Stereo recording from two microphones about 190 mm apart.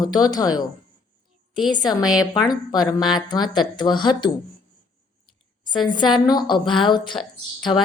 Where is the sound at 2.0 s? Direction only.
5° right (ahead or behind).